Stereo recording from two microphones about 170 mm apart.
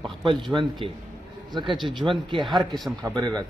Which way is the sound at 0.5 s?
20° right (ahead or behind).